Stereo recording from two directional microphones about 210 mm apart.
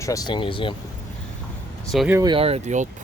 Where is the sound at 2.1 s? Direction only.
20° right (ahead or behind).